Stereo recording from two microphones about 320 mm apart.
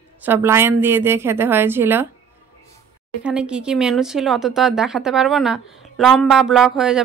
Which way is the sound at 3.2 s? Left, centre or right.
Centre.